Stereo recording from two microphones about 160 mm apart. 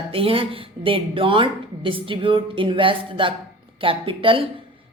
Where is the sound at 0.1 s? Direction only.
35° right (ahead or behind).